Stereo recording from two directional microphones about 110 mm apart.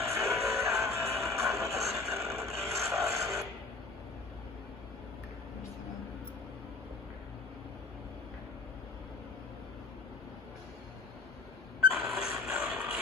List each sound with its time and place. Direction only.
0.0 s music: 25° right (ahead or behind)
12.0 s music: 5° right (ahead or behind)